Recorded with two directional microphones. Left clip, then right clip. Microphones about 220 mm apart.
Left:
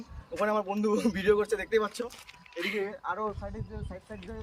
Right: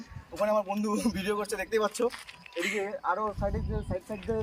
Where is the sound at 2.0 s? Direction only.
50° right (ahead or behind).